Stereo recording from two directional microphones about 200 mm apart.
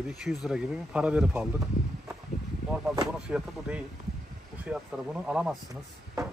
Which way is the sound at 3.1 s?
5° right (ahead or behind).